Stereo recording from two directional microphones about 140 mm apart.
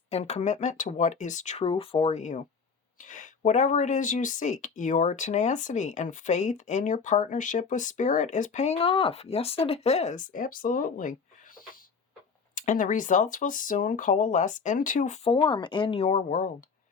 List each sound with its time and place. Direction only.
0.1 s speech: 50° left (ahead or behind)
1.6 s speech: 45° left (ahead or behind); by 15.2 s 65° left (ahead or behind)
15.2 s speech: 40° left (ahead or behind)
16.0 s speech: 65° left (ahead or behind)